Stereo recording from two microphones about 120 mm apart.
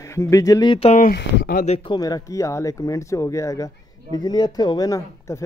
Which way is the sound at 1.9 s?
35° left (ahead or behind).